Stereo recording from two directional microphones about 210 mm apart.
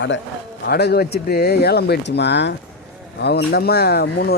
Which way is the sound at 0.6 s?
50° left (ahead or behind).